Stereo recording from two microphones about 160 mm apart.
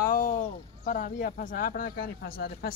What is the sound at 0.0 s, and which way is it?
Speech, 60° left (ahead or behind).